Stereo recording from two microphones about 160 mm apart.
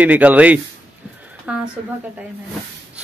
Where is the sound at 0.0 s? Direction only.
10° right (ahead or behind).